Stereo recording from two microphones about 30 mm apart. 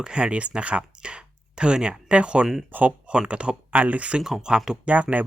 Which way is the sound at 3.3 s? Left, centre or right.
Right.